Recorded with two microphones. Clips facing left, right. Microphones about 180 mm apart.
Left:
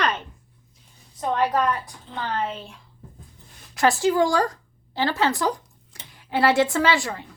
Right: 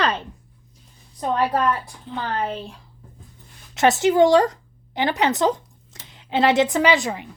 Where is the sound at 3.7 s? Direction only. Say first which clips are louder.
Right 3 dB; 20° right (ahead or behind).